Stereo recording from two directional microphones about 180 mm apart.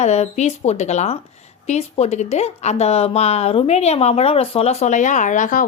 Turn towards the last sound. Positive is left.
turn(degrees=45)  # may be behind; listen again after turning